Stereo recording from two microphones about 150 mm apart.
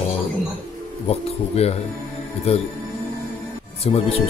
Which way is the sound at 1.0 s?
45° left (ahead or behind).